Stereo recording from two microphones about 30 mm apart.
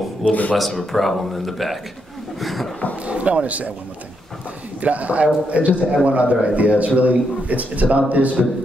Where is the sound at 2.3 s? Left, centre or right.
Centre.